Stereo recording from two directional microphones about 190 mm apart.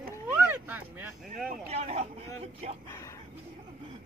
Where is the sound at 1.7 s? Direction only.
35° right (ahead or behind).